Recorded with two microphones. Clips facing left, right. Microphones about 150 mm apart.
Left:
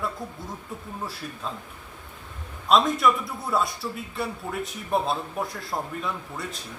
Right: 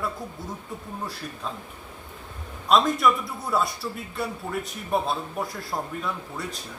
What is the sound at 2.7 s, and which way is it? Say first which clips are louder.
A man's voice: even; centre (ahead or behind).